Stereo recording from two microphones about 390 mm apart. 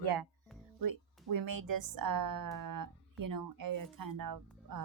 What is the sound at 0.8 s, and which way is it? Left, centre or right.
Speech, right.